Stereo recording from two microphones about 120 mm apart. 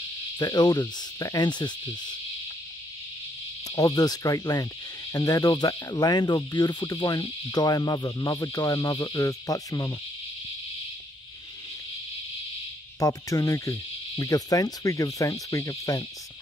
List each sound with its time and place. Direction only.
0.4 s insect: 35° left (ahead or behind)
3.6 s insect: 30° left (ahead or behind)
13.0 s insect: 30° left (ahead or behind)